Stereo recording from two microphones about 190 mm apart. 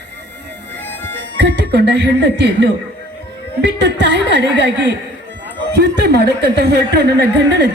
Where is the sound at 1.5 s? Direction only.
60° right (ahead or behind).